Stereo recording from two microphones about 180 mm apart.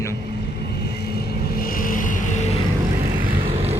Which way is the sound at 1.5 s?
50° left (ahead or behind).